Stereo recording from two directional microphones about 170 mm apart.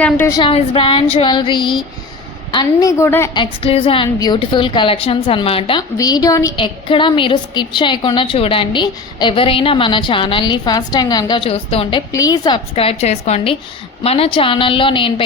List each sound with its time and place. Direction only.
0.0 s a woman's voice: 10° left (ahead or behind)
0.3 s a woman's voice: 30° left (ahead or behind)
3.0 s a woman's voice: 15° left (ahead or behind)
3.3 s a woman's voice: 30° left (ahead or behind)
6.0 s a woman's voice: 20° left (ahead or behind)
12.1 s a woman's voice: 20° left (ahead or behind)
12.7 s a woman's voice: 35° left (ahead or behind)